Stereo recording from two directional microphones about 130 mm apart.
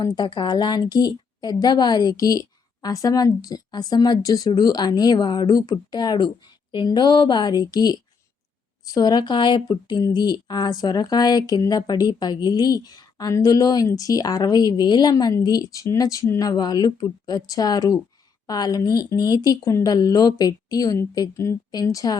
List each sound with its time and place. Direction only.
0.0 s speech: 35° left (ahead or behind)